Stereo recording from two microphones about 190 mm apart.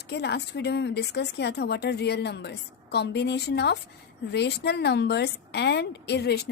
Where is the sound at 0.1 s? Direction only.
60° left (ahead or behind).